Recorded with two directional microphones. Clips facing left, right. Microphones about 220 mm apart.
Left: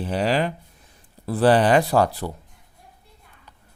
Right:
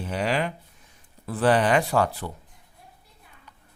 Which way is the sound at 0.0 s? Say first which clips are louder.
Left 4 dB; 35° left (ahead or behind).